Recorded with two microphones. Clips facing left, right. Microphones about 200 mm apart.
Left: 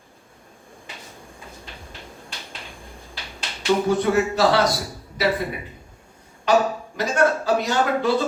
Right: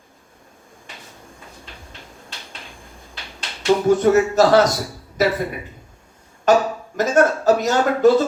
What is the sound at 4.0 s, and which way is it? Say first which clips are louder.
Speech: right 5 dB; 45° right (ahead or behind).